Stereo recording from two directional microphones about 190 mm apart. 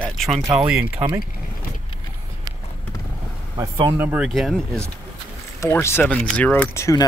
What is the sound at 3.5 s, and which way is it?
Speech, 25° right (ahead or behind).